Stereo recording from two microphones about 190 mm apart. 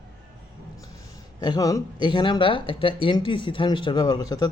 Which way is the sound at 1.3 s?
20° left (ahead or behind).